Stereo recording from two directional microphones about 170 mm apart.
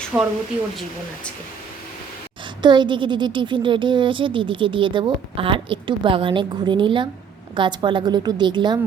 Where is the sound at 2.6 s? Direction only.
25° right (ahead or behind).